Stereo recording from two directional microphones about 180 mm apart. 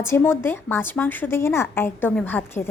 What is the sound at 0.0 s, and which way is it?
A woman's voice, 15° left (ahead or behind).